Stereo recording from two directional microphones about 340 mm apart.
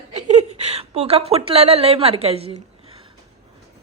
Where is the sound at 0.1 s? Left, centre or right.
Centre.